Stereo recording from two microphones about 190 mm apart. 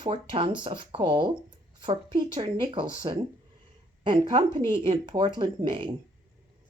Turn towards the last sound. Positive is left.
turn(degrees=-25)  # may be behind; listen again after turning